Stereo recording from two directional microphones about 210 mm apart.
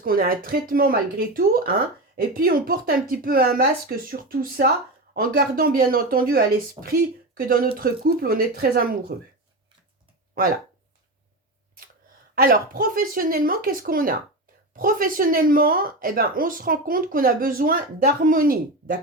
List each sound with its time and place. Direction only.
0.0 s speech: 45° right (ahead or behind)
12.3 s speech: 45° right (ahead or behind)